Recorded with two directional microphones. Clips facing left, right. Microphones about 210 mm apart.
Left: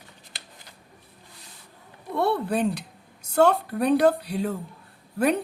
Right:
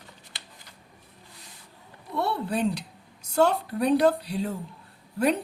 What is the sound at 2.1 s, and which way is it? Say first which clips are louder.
A woman's voice: left 4 dB; 55° left (ahead or behind).